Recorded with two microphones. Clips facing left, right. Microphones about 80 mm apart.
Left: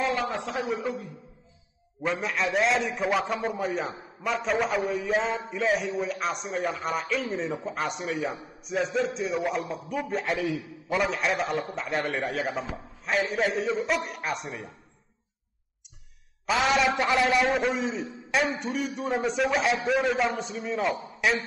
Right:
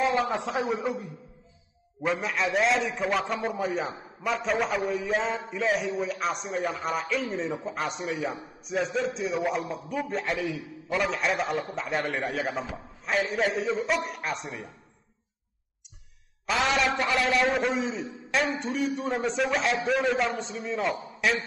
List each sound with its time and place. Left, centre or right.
0.1 s a man's voice: centre
0.7 s a man's voice: centre
2.0 s a man's voice: centre
16.4 s a man's voice: centre
16.9 s a man's voice: centre
17.4 s a man's voice: centre